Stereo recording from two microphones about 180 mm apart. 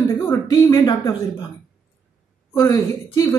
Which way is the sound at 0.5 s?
25° left (ahead or behind).